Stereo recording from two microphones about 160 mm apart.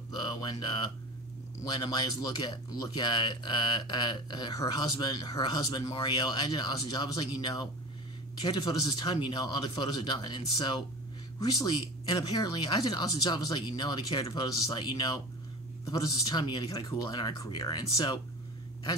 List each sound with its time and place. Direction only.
0.1 s speech: 25° left (ahead or behind)